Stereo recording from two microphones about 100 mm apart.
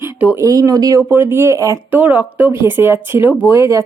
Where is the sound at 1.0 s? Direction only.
20° right (ahead or behind).